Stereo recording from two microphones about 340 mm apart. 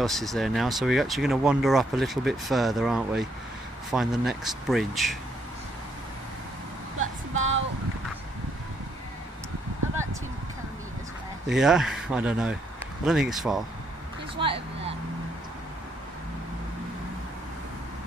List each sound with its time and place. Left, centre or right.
0.0 s speech: centre
7.0 s a sound: right
11.4 s speech: centre
14.4 s vehicle: centre